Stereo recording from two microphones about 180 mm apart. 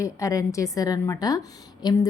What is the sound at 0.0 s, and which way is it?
A woman's voice, 20° left (ahead or behind).